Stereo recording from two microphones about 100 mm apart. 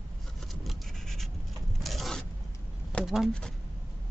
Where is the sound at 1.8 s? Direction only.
Centre (ahead or behind).